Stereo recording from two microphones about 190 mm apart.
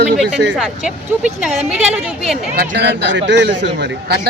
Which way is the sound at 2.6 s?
65° right (ahead or behind).